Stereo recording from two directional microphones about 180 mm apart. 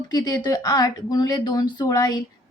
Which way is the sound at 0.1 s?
20° left (ahead or behind).